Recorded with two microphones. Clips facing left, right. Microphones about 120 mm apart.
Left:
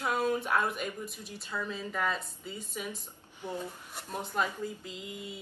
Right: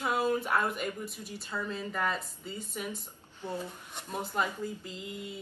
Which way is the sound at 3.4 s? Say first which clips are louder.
Right 1 dB; 15° left (ahead or behind).